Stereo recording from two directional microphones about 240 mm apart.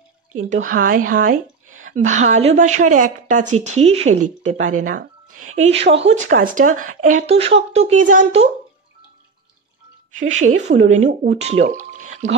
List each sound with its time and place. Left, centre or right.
0.7 s a woman's voice: right
10.1 s a woman's voice: right